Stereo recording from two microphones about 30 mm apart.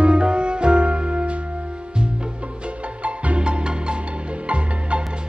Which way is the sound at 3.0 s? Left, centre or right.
Right.